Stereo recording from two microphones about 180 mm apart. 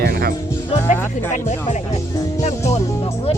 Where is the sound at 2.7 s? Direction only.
35° left (ahead or behind).